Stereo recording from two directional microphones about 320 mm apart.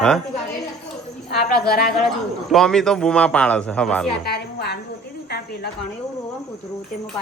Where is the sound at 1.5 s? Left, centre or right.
Left.